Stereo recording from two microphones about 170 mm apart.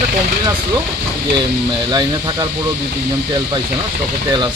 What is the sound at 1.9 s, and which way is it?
Speech, 25° right (ahead or behind).